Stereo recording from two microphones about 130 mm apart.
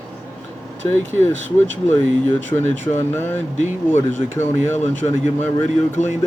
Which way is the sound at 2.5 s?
20° left (ahead or behind).